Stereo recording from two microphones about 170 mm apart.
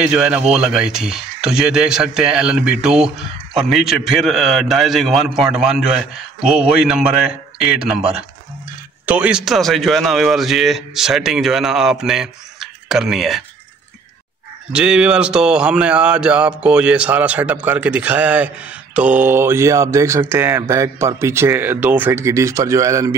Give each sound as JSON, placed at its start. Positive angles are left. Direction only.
{"t": 0.0, "sound": "a man's voice", "side_deg": -5}
{"t": 9.0, "sound": "a man's voice", "side_deg": -5}
{"t": 14.7, "sound": "speech", "side_deg": -5}